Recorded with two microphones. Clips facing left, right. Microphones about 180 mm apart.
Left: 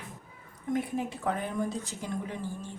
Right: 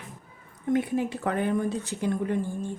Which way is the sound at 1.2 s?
65° right (ahead or behind).